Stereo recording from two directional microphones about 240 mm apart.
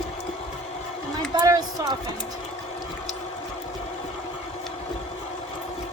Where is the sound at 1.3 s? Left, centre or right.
Centre.